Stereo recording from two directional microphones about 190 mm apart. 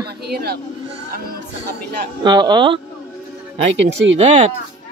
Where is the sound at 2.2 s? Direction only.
25° right (ahead or behind).